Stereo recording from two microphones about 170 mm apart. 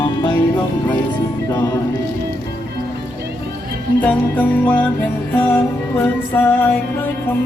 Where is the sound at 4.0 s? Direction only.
10° left (ahead or behind).